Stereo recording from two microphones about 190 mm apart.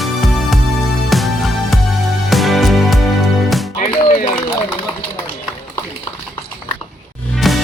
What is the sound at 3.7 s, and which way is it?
Music, 30° left (ahead or behind).